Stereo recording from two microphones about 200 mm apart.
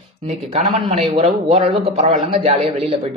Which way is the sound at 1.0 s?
30° right (ahead or behind).